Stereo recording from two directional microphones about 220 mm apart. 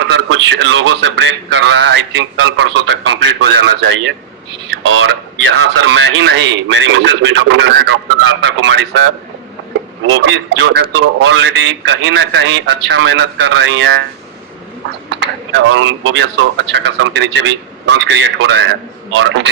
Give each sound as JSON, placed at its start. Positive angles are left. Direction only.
{"t": 0.1, "sound": "a man's voice", "side_deg": -60}
{"t": 15.1, "sound": "a man's voice", "side_deg": -55}